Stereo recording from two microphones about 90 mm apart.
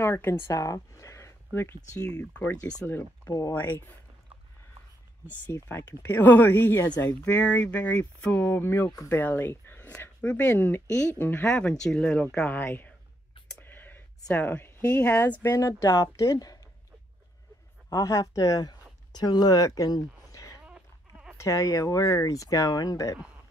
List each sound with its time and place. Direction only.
0.0 s speech: 25° left (ahead or behind)
2.1 s speech: 15° left (ahead or behind)
5.5 s speech: 30° left (ahead or behind)
11.4 s speech: 10° left (ahead or behind)
13.6 s a sound: 20° left (ahead or behind)
14.3 s speech: 20° left (ahead or behind)
15.5 s speech: 35° left (ahead or behind)
17.8 s speech: 35° left (ahead or behind)
20.6 s goat: 10° right (ahead or behind)
21.4 s speech: 35° left (ahead or behind)